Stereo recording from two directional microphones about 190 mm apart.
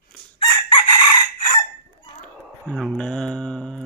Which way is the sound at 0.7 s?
25° left (ahead or behind).